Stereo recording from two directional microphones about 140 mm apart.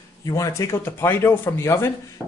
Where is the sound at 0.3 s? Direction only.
20° left (ahead or behind).